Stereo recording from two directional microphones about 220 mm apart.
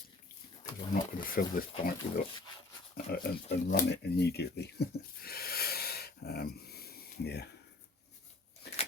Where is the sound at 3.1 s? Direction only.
45° left (ahead or behind).